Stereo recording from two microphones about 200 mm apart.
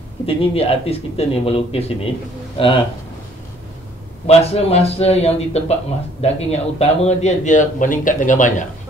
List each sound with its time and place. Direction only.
0.3 s speech: 30° left (ahead or behind)
4.3 s speech: 30° left (ahead or behind)